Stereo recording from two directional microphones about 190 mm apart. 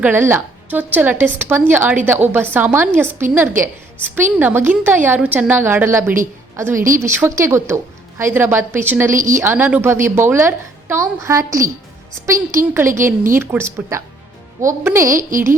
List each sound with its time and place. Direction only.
0.0 s a woman's voice: 10° right (ahead or behind)
9.1 s speech: 45° right (ahead or behind)
9.4 s a woman's voice: 10° right (ahead or behind)
13.0 s speech: 45° right (ahead or behind)
13.3 s a woman's voice: 10° right (ahead or behind)
15.1 s speech: 45° right (ahead or behind)